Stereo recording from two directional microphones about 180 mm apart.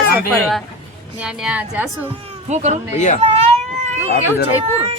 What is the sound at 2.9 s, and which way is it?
Speech, 40° left (ahead or behind).